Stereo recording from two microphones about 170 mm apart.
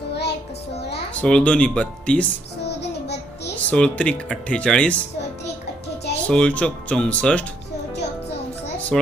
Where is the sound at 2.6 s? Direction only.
85° left.